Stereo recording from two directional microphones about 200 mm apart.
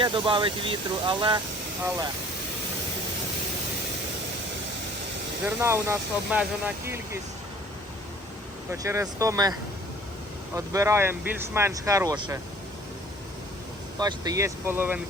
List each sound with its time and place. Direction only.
0.0 s speech: 25° right (ahead or behind)
5.5 s speech: 10° right (ahead or behind)
8.7 s speech: 15° right (ahead or behind)
14.0 s speech: 20° right (ahead or behind)